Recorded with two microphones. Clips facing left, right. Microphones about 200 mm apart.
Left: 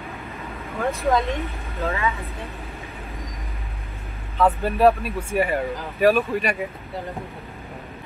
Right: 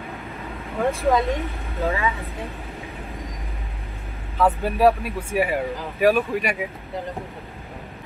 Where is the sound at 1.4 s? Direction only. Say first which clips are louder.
Right 2 dB; 15° right (ahead or behind).